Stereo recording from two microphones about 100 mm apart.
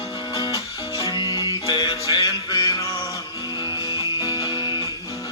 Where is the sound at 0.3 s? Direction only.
40° left (ahead or behind).